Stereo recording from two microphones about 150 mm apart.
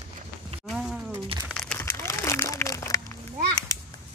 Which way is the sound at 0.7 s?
5° right (ahead or behind).